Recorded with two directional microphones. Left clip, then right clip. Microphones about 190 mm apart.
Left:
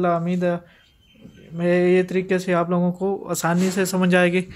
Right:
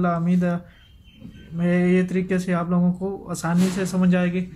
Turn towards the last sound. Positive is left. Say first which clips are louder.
# left 6 dB
turn(degrees=45)  # may be behind; listen again after turning